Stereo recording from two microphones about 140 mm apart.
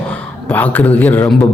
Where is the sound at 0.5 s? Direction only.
10° left (ahead or behind).